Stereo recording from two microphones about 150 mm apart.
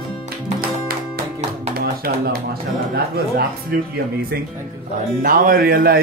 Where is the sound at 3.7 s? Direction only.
90° right.